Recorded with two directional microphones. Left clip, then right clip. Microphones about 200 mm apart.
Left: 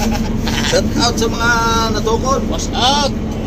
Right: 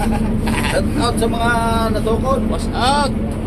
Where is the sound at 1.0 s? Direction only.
30° left (ahead or behind).